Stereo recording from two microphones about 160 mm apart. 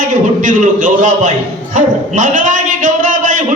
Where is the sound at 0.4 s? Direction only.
55° right (ahead or behind).